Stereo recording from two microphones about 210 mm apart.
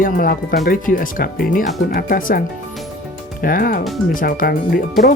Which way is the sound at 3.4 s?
40° left (ahead or behind).